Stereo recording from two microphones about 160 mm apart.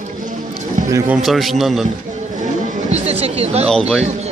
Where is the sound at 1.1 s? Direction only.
Centre (ahead or behind).